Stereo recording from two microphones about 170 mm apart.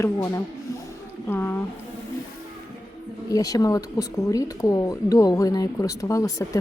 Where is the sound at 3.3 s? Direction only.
20° left (ahead or behind).